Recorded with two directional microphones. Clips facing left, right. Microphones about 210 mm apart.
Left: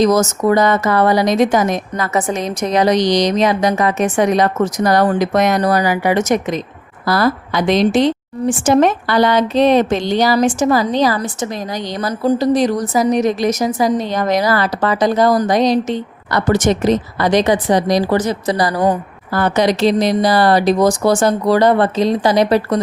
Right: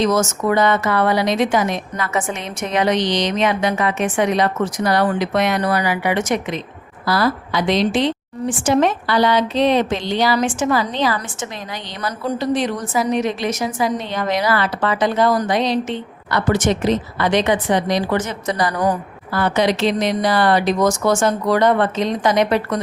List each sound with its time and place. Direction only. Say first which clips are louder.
0.0 s a woman's voice: left 4 dB; 40° left (ahead or behind)
19.3 s a woman's voice: left 3 dB; 45° left (ahead or behind)